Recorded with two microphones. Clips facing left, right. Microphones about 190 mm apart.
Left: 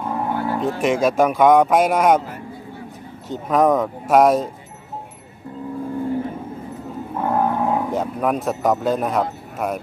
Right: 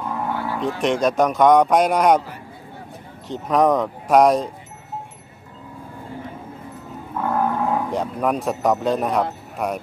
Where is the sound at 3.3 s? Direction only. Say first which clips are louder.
Left 1 dB; centre (ahead or behind).